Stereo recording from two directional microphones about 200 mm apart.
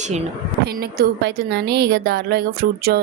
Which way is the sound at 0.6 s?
50° right (ahead or behind).